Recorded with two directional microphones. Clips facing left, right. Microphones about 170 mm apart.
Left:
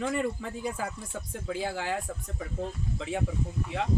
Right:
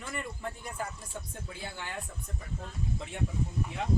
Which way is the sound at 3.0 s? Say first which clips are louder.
Left 8 dB; 90° left.